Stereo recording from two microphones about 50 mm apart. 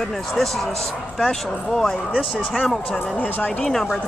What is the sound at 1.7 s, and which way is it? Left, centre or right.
Speech, centre.